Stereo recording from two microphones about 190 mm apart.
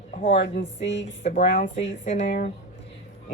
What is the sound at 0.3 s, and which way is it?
Speech, 65° left (ahead or behind).